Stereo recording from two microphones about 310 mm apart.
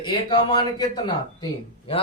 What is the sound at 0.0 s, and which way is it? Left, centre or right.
A man's voice, centre.